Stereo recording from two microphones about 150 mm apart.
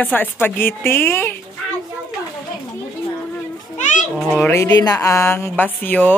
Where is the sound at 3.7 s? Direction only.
55° left (ahead or behind).